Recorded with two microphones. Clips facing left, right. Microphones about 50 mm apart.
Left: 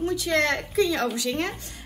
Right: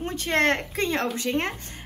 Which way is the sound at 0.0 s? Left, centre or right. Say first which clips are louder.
Even; right.